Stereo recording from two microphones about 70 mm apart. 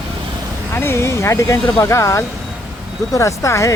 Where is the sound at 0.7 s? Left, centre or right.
Left.